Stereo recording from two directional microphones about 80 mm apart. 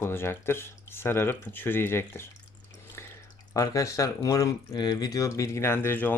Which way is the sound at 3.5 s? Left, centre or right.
Left.